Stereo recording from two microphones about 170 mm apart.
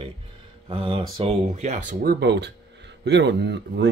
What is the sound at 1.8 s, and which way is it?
Speech, 70° right (ahead or behind).